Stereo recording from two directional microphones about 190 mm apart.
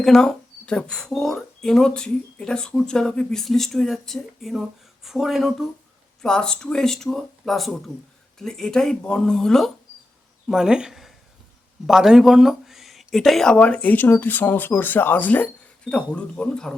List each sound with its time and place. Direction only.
0.0 s speech: centre (ahead or behind)